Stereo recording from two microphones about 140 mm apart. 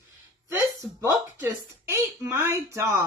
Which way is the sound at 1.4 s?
20° right (ahead or behind).